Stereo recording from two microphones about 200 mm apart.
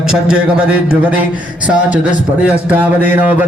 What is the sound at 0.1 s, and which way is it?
Mantra, 5° right (ahead or behind).